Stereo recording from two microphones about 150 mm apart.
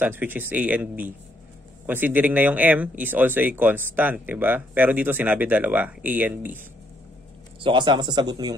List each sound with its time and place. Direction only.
0.0 s speech: 10° right (ahead or behind)
7.6 s speech: 30° right (ahead or behind)